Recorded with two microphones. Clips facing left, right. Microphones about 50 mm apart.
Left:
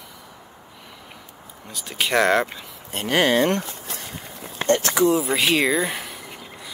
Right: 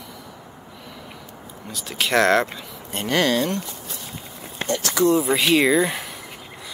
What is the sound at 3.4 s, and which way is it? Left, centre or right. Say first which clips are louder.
Speech: left 4 dB; left.